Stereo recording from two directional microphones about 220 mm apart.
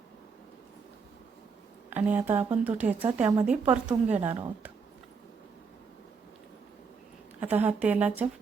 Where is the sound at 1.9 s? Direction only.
5° right (ahead or behind).